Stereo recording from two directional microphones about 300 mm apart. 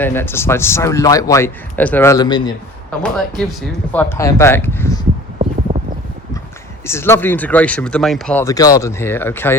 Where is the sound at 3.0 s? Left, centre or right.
Centre.